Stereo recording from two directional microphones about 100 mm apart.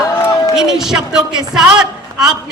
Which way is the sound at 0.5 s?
5° right (ahead or behind).